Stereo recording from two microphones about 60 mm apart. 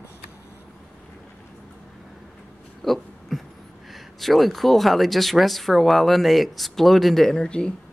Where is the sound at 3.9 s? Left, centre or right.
Centre.